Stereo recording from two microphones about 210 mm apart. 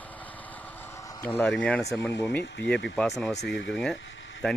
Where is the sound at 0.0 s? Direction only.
5° left (ahead or behind).